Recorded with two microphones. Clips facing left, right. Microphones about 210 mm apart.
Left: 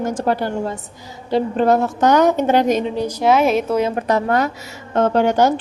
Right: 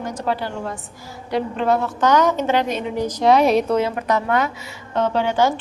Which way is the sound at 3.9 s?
30° left (ahead or behind).